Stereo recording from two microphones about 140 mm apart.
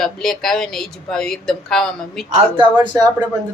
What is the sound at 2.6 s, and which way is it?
Speech, 35° right (ahead or behind).